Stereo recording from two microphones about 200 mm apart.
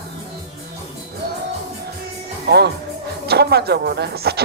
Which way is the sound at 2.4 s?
55° right (ahead or behind).